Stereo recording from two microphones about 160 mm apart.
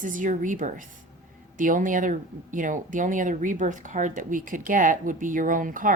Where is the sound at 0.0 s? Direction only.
55° right (ahead or behind).